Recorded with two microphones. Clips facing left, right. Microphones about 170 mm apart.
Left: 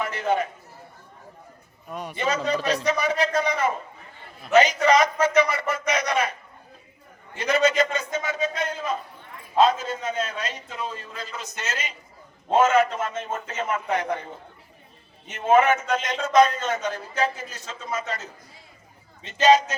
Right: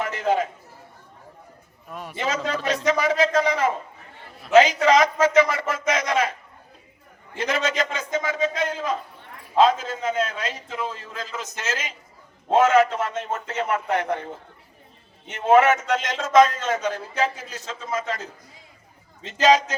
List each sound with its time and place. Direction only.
1.9 s a man's voice: centre (ahead or behind)
2.2 s a man's voice: 90° right
7.3 s a man's voice: 90° right; by 14.2 s 65° right (ahead or behind)
15.3 s a man's voice: 75° right (ahead or behind)
19.2 s a man's voice: 90° right